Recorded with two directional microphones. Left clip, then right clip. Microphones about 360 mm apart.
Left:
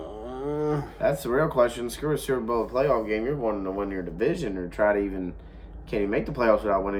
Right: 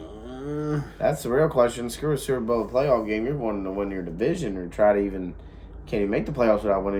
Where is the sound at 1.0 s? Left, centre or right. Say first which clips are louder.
Right 3 dB; centre.